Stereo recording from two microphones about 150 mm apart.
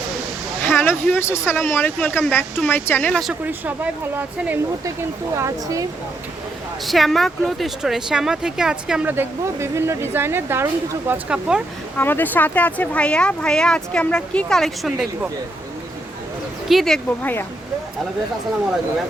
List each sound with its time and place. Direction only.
0.6 s speech: 15° left (ahead or behind)
3.4 s speech: 10° right (ahead or behind)
6.8 s speech: centre (ahead or behind)
11.9 s speech: 10° left (ahead or behind)
16.6 s speech: centre (ahead or behind)